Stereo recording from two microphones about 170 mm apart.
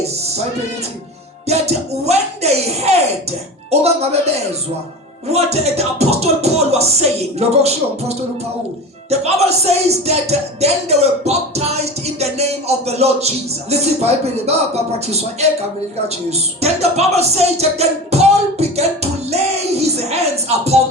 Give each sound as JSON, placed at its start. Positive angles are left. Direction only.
{"t": 0.0, "sound": "music", "side_deg": -40}
{"t": 1.5, "sound": "music", "side_deg": -40}
{"t": 5.3, "sound": "music", "side_deg": -40}